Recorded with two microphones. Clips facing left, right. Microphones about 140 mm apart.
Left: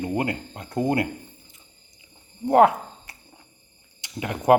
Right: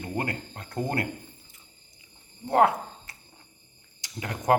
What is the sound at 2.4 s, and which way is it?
Speech, 20° left (ahead or behind).